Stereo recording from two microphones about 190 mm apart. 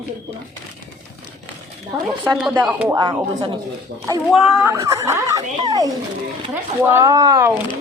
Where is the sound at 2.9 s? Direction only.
20° right (ahead or behind).